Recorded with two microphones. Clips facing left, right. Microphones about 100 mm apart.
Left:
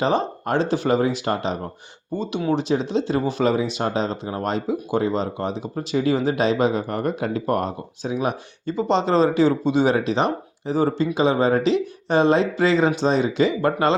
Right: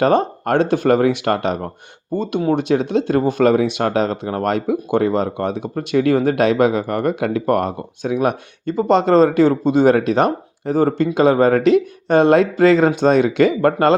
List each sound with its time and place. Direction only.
0.0 s speech: 55° right (ahead or behind)
2.1 s speech: 50° right (ahead or behind)
13.0 s speech: 60° right (ahead or behind)